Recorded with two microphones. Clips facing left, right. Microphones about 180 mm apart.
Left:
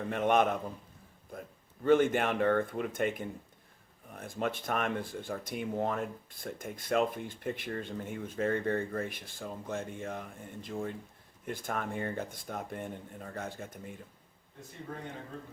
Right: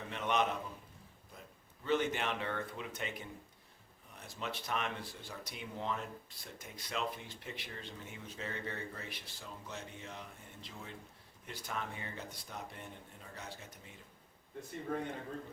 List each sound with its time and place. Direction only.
0.1 s speech: 50° left (ahead or behind)